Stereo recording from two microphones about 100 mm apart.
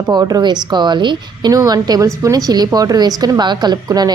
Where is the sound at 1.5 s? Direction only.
35° right (ahead or behind).